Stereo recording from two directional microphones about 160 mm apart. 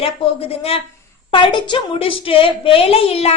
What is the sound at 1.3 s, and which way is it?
A woman's voice, 30° left (ahead or behind).